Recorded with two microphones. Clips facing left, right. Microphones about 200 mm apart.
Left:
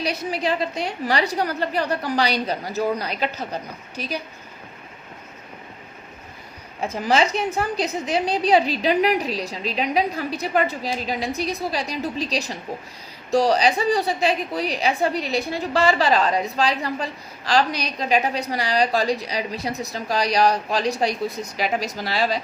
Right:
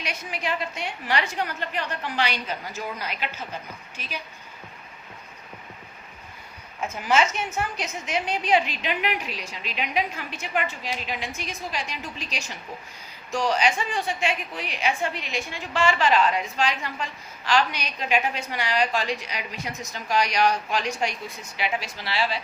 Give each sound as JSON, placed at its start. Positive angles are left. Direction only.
{"t": 0.0, "sound": "a woman's voice", "side_deg": 35}
{"t": 6.7, "sound": "a woman's voice", "side_deg": 35}